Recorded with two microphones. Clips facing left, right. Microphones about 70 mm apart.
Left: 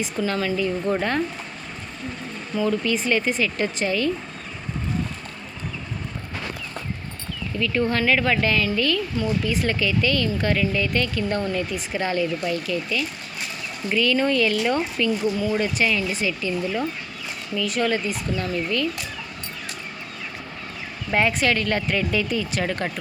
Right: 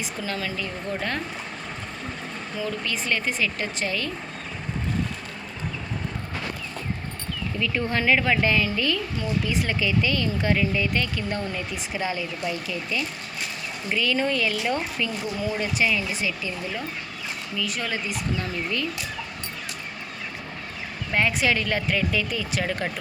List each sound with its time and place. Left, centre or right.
0.0 s speech: centre
2.6 s speech: centre
7.6 s speech: centre
18.3 s speech: centre
21.1 s speech: centre
21.3 s speech: centre